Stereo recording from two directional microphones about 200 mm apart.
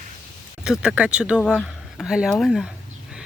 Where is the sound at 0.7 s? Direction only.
5° right (ahead or behind).